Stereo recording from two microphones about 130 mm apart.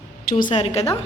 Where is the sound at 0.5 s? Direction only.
55° left (ahead or behind).